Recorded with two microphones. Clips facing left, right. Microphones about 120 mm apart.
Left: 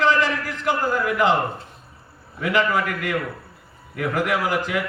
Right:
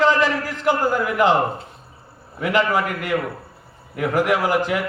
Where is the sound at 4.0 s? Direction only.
35° right (ahead or behind).